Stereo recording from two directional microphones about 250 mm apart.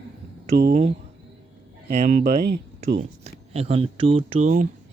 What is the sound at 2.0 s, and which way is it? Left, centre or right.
Speech, right.